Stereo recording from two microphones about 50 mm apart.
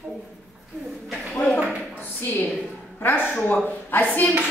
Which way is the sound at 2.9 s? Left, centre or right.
Left.